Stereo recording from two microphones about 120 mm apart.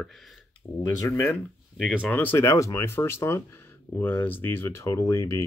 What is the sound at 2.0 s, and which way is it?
Speech, 15° left (ahead or behind).